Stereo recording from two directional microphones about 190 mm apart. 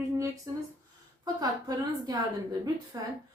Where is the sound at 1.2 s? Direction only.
20° right (ahead or behind).